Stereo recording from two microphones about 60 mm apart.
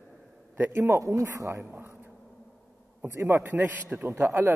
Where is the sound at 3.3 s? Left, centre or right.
Right.